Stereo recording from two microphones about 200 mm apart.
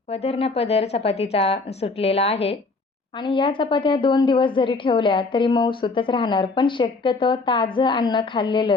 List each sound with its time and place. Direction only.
0.1 s a woman's voice: 30° left (ahead or behind)